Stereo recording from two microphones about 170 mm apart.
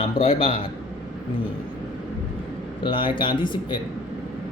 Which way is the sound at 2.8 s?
30° left (ahead or behind).